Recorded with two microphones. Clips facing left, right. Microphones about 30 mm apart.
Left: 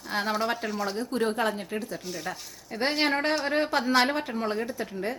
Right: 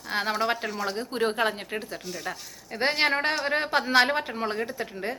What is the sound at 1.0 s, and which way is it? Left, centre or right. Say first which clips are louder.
Speech: right 2 dB; right.